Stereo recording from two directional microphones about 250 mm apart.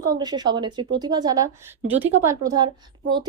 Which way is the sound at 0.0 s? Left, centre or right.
Centre.